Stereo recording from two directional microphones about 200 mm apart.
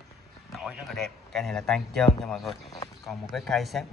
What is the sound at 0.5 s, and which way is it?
A man's voice, centre (ahead or behind).